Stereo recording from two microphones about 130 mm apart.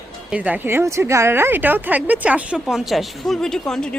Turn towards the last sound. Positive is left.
turn(degrees=5)  # may be behind; listen again after turning